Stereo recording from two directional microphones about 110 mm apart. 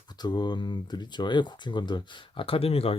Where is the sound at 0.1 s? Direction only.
40° left (ahead or behind).